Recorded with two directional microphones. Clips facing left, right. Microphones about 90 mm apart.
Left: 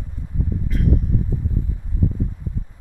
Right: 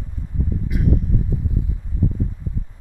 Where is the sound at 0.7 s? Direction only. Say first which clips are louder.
Even; 15° right (ahead or behind).